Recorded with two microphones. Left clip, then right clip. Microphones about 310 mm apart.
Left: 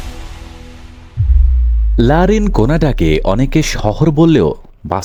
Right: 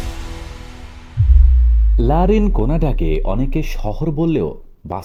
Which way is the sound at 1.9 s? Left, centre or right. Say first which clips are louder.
Left 4 dB; left.